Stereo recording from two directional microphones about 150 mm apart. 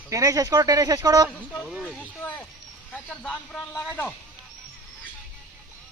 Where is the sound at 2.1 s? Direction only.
10° left (ahead or behind).